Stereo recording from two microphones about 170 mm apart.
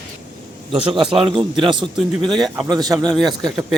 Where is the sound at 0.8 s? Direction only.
30° right (ahead or behind).